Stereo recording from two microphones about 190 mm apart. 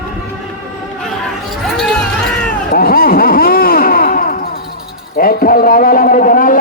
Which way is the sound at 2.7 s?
50° left (ahead or behind).